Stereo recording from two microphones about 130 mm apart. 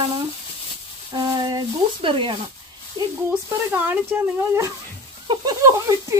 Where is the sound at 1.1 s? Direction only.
35° right (ahead or behind).